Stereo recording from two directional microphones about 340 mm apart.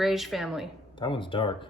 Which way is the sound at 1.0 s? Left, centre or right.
Centre.